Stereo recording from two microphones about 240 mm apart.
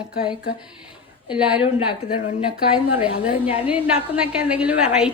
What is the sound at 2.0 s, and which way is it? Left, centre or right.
Speech, left.